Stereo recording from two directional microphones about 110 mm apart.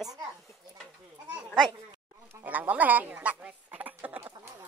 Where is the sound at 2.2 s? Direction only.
15° right (ahead or behind).